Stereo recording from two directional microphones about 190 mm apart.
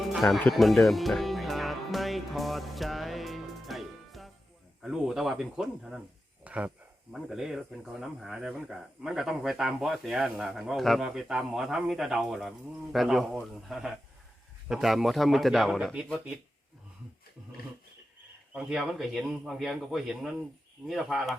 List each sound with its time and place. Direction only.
0.1 s music: centre (ahead or behind)
4.8 s speech: centre (ahead or behind)
6.4 s a sound: 5° right (ahead or behind)
7.1 s speech: centre (ahead or behind)
18.5 s speech: 5° right (ahead or behind)